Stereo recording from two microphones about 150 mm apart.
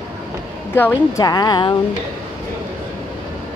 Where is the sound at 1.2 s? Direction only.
25° left (ahead or behind).